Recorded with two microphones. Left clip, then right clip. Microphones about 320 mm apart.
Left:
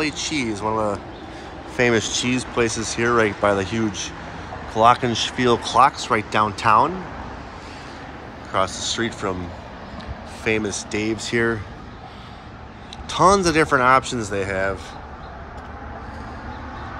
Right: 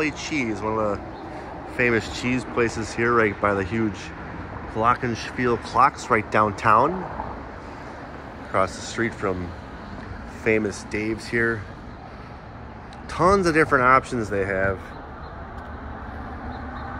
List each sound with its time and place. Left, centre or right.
0.0 s speech: centre
8.5 s speech: centre
10.4 s speech: centre
13.1 s speech: centre